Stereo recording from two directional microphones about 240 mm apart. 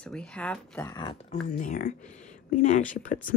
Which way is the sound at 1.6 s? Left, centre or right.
Left.